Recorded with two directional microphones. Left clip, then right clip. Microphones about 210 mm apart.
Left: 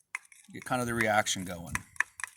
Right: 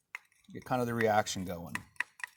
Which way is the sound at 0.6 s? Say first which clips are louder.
Left 1 dB; 20° right (ahead or behind).